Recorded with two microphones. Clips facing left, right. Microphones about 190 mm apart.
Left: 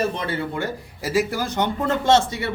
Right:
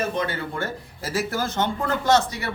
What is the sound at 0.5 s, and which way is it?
A man's voice, 15° left (ahead or behind).